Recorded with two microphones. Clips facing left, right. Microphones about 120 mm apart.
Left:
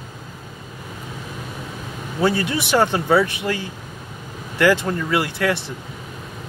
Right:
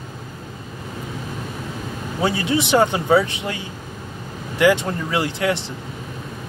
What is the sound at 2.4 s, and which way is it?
Speech, 20° right (ahead or behind).